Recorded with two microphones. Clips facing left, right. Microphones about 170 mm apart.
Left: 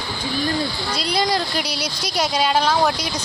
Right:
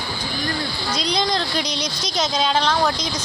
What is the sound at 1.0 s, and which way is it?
A woman's voice, 5° left (ahead or behind).